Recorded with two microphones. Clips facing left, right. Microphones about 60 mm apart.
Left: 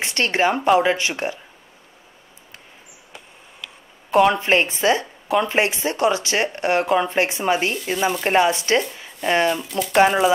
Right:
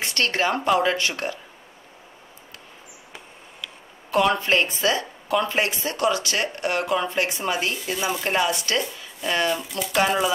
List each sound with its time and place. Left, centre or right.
0.0 s a woman's voice: left
4.1 s a woman's voice: left
9.6 s speech: centre